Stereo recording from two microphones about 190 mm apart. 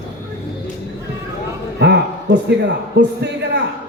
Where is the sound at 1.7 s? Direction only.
65° right (ahead or behind).